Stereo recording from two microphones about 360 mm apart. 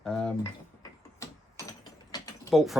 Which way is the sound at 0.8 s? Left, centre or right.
Centre.